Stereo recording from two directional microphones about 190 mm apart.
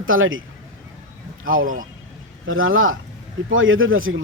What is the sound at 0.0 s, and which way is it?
Speech, 90° right.